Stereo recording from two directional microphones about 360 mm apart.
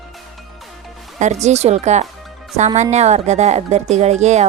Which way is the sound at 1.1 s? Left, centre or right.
Centre.